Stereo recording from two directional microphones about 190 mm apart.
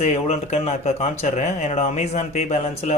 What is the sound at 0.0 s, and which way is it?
Speech, 35° left (ahead or behind).